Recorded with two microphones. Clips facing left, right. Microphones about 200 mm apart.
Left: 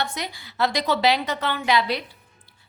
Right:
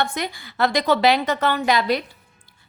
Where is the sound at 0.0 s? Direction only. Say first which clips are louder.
Right 4 dB; 50° right (ahead or behind).